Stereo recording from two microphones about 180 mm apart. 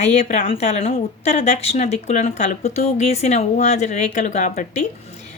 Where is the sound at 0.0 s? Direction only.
40° left (ahead or behind).